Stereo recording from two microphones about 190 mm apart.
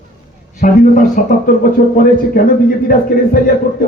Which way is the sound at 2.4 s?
50° left (ahead or behind).